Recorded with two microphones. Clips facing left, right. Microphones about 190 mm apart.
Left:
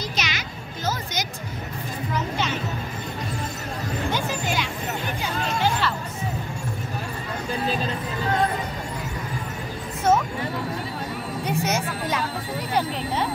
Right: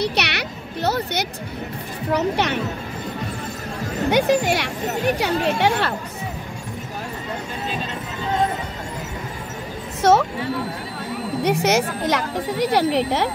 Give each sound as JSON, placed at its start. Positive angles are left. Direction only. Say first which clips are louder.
{"t": 0.0, "sound": "music", "louder": "right 7 dB", "side_deg": -70}
{"t": 2.1, "sound": "speech", "louder": "right 7 dB", "side_deg": -70}
{"t": 4.1, "sound": "speech", "louder": "right 13 dB", "side_deg": -70}
{"t": 10.0, "sound": "a woman's voice", "louder": "right 4 dB", "side_deg": -85}
{"t": 11.4, "sound": "a woman's voice", "louder": "right 7 dB", "side_deg": -85}